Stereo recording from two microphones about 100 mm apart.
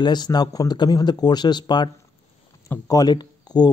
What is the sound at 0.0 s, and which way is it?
Speech, 45° left (ahead or behind).